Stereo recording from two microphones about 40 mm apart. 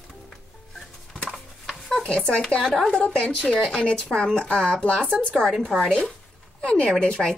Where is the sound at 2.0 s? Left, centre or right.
Left.